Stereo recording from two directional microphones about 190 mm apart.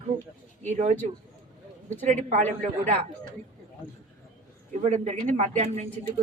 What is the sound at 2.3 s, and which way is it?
Speech, 40° right (ahead or behind).